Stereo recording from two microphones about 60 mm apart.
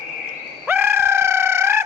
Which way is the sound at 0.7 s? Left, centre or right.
Right.